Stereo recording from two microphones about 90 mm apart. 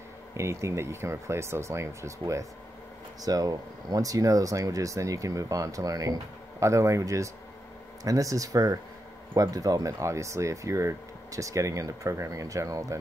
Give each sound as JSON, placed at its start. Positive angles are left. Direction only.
{"t": 0.4, "sound": "speech", "side_deg": -35}